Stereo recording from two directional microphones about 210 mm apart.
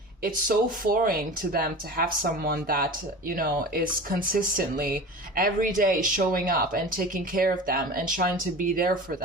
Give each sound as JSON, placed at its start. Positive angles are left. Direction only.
{"t": 0.2, "sound": "speech", "side_deg": -45}